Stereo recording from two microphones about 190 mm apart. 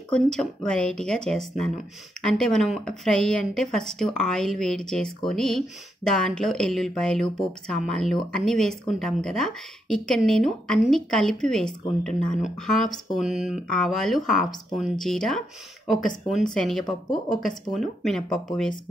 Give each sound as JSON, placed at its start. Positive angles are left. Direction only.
{"t": 0.1, "sound": "speech", "side_deg": 5}